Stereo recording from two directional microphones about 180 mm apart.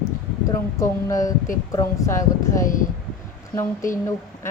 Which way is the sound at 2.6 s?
45° left (ahead or behind).